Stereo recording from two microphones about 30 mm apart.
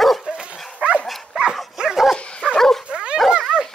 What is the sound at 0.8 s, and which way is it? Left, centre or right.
Dog, right.